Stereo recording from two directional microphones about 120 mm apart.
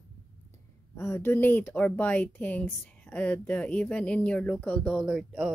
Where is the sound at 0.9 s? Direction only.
20° left (ahead or behind).